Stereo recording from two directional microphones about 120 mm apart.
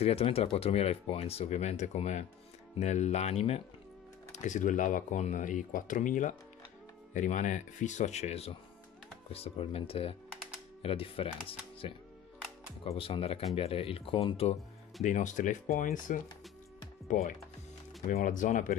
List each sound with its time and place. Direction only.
0.0 s speech: 55° left (ahead or behind)
4.4 s speech: 90° left; by 14.6 s 55° left (ahead or behind)
15.0 s speech: 90° left